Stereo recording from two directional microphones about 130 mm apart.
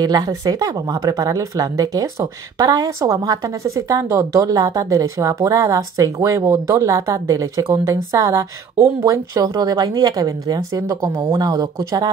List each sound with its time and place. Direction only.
0.0 s speech: 30° right (ahead or behind)